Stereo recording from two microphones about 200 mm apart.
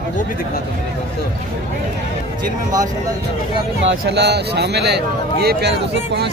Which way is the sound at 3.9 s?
55° right (ahead or behind).